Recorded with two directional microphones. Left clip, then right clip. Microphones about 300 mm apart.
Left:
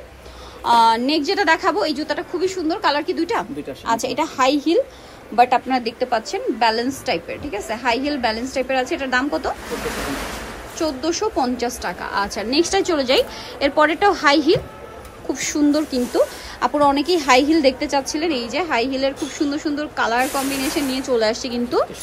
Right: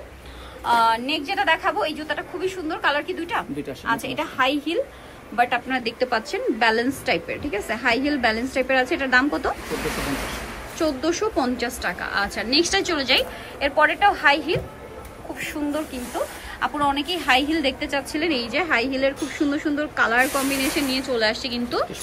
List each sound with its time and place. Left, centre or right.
0.7 s a woman's voice: centre
10.8 s a woman's voice: centre
16.5 s a woman's voice: centre